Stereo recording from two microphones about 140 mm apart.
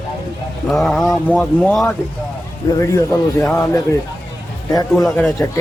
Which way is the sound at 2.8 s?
25° left (ahead or behind).